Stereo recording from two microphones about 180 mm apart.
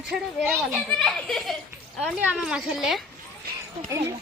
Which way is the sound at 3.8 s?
15° right (ahead or behind).